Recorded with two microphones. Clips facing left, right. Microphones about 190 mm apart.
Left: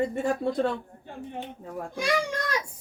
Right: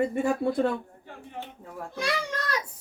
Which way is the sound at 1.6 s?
10° left (ahead or behind).